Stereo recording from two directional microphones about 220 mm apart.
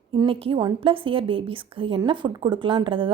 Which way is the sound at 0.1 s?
25° right (ahead or behind).